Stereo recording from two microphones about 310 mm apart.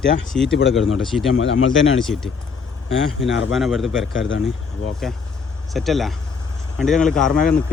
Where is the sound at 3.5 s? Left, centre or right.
Centre.